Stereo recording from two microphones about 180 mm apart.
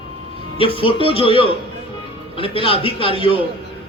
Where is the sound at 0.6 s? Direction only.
30° left (ahead or behind).